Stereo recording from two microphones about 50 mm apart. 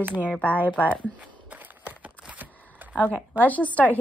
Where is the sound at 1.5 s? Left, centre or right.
Right.